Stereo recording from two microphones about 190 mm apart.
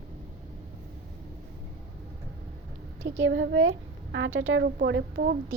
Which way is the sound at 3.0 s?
80° right.